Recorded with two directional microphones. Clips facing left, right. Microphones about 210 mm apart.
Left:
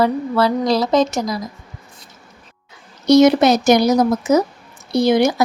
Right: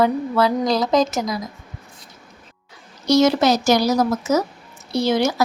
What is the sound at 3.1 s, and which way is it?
A woman's voice, 20° left (ahead or behind).